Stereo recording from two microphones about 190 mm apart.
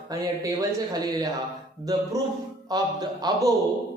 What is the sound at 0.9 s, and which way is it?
Speech, 20° right (ahead or behind).